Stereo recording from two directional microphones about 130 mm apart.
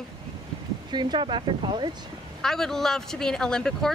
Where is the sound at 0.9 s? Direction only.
35° right (ahead or behind).